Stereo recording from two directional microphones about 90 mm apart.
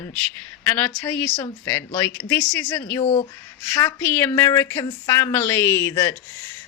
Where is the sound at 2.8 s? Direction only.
35° left (ahead or behind).